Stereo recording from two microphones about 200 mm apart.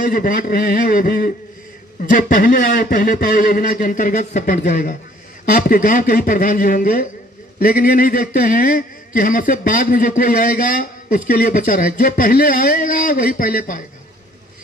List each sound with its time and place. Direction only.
0.1 s a man's voice: 45° left (ahead or behind)